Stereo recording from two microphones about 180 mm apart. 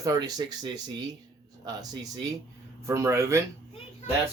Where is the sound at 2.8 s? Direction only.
15° right (ahead or behind).